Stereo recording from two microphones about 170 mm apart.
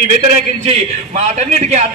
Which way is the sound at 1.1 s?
40° right (ahead or behind).